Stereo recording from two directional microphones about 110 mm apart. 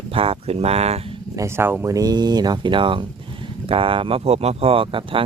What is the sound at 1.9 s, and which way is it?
Speech, 40° right (ahead or behind).